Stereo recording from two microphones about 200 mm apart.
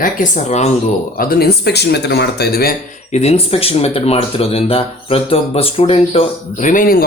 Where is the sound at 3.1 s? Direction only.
30° left (ahead or behind).